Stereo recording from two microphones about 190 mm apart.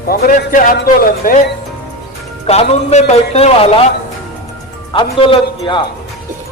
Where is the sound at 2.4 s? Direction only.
35° left (ahead or behind).